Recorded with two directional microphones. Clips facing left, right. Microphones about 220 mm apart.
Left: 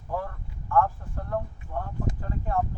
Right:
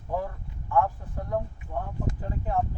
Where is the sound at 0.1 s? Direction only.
15° right (ahead or behind).